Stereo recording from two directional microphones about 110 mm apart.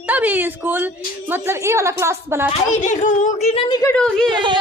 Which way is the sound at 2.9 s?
90° left.